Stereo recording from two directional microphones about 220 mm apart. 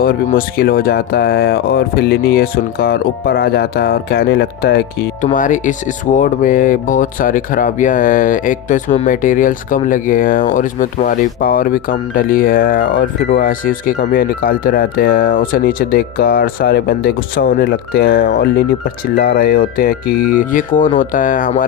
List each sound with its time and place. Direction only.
0.0 s speech: 40° left (ahead or behind)